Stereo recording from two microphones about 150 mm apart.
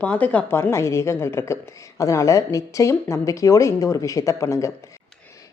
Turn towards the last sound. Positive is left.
turn(degrees=20)  # may be behind; listen again after turning